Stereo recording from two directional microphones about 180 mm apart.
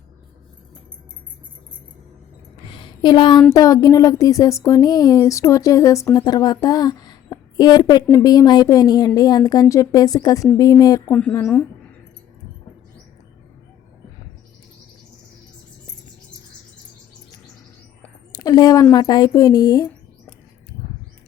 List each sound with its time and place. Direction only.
2.6 s a sound: 30° left (ahead or behind)
3.5 s speech: 20° left (ahead or behind)
11.1 s speech: 5° left (ahead or behind)
18.3 s speech: 20° left (ahead or behind)